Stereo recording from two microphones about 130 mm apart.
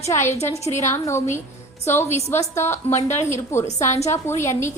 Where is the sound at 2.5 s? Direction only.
20° left (ahead or behind).